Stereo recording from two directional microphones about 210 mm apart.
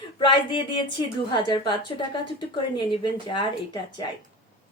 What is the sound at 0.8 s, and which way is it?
A woman's voice, 20° left (ahead or behind).